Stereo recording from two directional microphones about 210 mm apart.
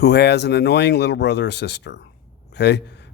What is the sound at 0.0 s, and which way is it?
A man's voice, 50° left (ahead or behind).